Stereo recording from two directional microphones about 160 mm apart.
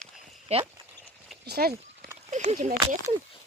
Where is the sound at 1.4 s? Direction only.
80° right.